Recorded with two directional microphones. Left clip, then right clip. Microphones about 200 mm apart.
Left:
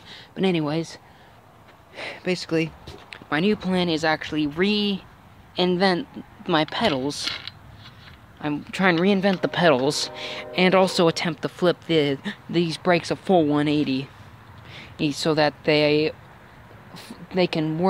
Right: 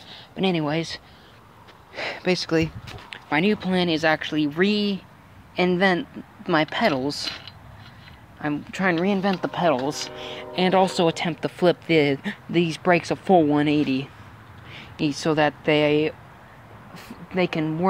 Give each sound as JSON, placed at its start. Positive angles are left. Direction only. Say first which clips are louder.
{"t": 0.1, "sound": "speech", "louder": "left 1 dB", "side_deg": 20}
{"t": 2.0, "sound": "a sound", "louder": "right 3 dB", "side_deg": -10}
{"t": 3.1, "sound": "speech", "louder": "right 1 dB", "side_deg": 10}
{"t": 8.4, "sound": "speech", "louder": "left 1 dB", "side_deg": 10}
{"t": 8.9, "sound": "speech", "louder": "left 2 dB", "side_deg": 25}
{"t": 11.4, "sound": "a woman's voice", "louder": "right 2 dB", "side_deg": 5}